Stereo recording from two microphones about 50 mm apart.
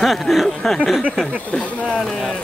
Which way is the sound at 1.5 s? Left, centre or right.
Left.